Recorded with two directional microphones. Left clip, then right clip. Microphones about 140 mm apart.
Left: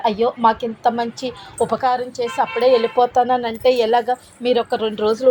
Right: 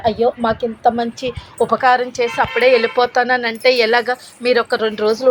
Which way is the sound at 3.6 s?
55° left (ahead or behind).